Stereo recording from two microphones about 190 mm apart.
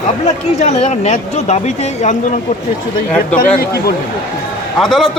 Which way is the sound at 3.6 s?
55° left (ahead or behind).